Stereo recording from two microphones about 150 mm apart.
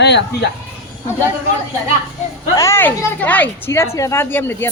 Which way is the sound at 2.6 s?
15° left (ahead or behind).